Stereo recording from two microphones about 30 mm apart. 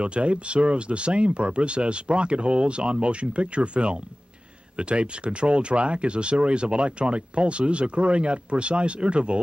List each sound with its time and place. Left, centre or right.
0.0 s speech: right